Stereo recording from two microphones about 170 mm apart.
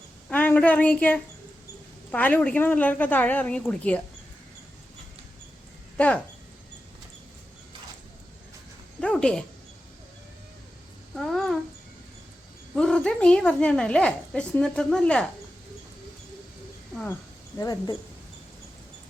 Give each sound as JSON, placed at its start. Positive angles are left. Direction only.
{"t": 0.3, "sound": "a woman's voice", "side_deg": 10}
{"t": 6.0, "sound": "a woman's voice", "side_deg": 10}
{"t": 9.0, "sound": "speech", "side_deg": 5}
{"t": 11.1, "sound": "a sound", "side_deg": 0}
{"t": 12.7, "sound": "a woman's voice", "side_deg": 5}
{"t": 16.9, "sound": "speech", "side_deg": 10}
{"t": 17.6, "sound": "speech", "side_deg": 20}